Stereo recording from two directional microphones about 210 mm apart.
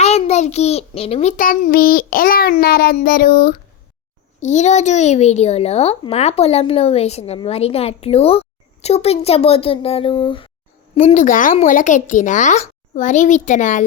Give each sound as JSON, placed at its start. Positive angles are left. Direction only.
{"t": 0.0, "sound": "a child's voice", "side_deg": 30}
{"t": 10.9, "sound": "speech", "side_deg": 35}